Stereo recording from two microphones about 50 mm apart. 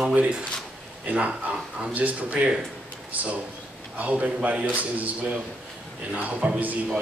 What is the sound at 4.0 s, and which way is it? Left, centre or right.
Speech, right.